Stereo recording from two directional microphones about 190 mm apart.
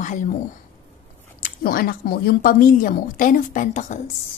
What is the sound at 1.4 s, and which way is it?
Speech, 50° left (ahead or behind).